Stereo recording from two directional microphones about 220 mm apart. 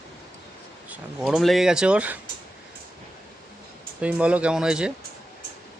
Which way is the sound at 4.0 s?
5° right (ahead or behind).